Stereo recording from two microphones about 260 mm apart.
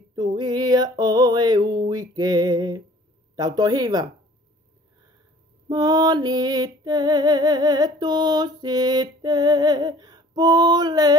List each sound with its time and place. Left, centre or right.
0.1 s music: centre
3.3 s female singing: centre
5.7 s female singing: centre